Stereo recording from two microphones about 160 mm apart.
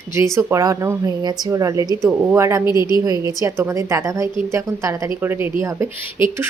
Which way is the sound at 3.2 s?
20° right (ahead or behind).